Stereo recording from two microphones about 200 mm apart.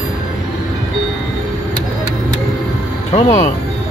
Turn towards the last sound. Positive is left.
turn(degrees=35)  # may be behind; listen again after turning